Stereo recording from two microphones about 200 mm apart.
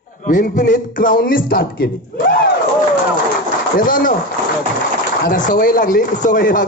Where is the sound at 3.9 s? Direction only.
45° left (ahead or behind).